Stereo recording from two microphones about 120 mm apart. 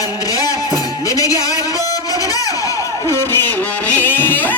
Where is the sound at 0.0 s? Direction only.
30° left (ahead or behind).